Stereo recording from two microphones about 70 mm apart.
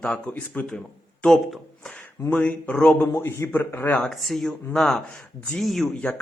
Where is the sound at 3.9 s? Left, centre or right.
Centre.